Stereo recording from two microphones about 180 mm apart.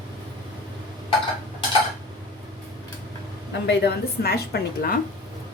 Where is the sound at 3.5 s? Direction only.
70° left (ahead or behind).